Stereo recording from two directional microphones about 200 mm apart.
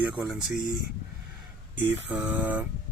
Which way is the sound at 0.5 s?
45° left (ahead or behind).